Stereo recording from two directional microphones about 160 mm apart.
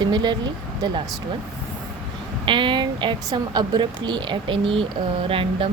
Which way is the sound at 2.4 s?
30° right (ahead or behind).